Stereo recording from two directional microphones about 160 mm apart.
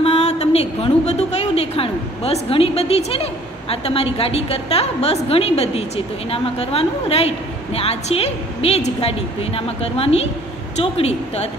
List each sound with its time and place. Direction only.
0.0 s a woman's voice: 40° left (ahead or behind)